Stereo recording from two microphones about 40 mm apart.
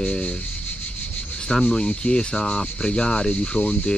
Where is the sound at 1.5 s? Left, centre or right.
Centre.